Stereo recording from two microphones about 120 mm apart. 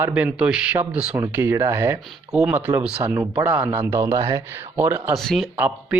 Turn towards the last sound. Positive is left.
turn(degrees=0)  # may be behind; listen again after turning